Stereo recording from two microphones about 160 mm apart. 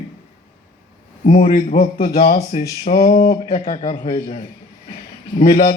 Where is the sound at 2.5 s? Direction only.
40° left (ahead or behind).